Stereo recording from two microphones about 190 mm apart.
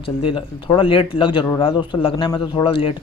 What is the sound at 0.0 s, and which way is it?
A man's voice, 30° left (ahead or behind).